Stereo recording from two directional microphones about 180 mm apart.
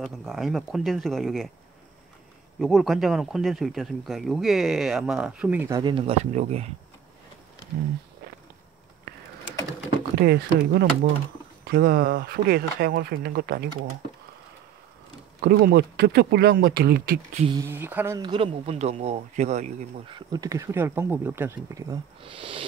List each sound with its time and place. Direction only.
0.0 s speech: centre (ahead or behind)
2.6 s speech: centre (ahead or behind)
5.8 s speech: 25° right (ahead or behind)
10.1 s speech: 60° right (ahead or behind)
15.4 s speech: 60° right (ahead or behind)
17.3 s speech: 35° right (ahead or behind)
17.6 s speech: 10° right (ahead or behind); by 20.2 s 40° right (ahead or behind)
20.2 s speech: 20° right (ahead or behind)